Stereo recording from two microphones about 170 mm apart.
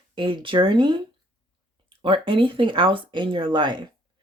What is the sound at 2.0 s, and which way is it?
Speech, 30° right (ahead or behind).